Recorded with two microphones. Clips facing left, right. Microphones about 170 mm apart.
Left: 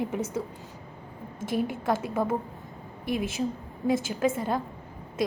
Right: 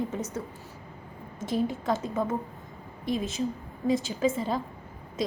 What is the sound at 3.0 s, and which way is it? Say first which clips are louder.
Speech: even; 65° left (ahead or behind).